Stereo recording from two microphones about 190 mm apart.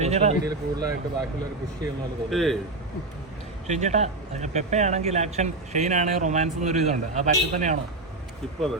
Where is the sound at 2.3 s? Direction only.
Centre (ahead or behind).